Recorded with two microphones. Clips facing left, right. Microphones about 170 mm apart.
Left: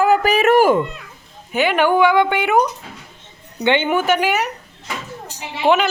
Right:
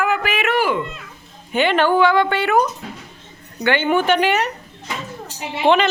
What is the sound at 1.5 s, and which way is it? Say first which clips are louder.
Speech: even; 10° left (ahead or behind).